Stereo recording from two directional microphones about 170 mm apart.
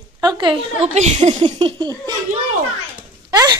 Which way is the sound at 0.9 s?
40° right (ahead or behind).